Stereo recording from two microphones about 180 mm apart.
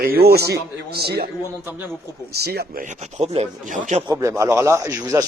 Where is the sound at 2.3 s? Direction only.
60° right (ahead or behind).